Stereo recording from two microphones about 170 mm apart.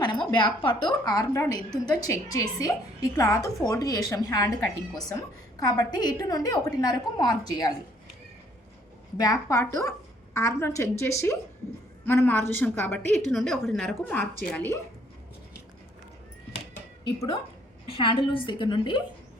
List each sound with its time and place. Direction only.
0.0 s a woman's voice: 25° left (ahead or behind)
9.1 s a woman's voice: 20° left (ahead or behind)
13.3 s a woman's voice: centre (ahead or behind)
17.8 s a woman's voice: 30° left (ahead or behind)